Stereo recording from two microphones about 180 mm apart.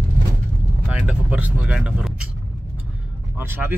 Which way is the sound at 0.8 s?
5° right (ahead or behind).